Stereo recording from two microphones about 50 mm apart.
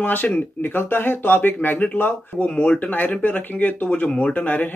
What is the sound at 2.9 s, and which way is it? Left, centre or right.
Speech, left.